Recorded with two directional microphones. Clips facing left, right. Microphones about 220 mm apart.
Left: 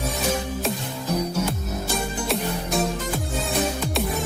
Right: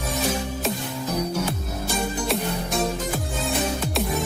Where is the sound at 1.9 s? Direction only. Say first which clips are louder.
Right 2 dB; centre (ahead or behind).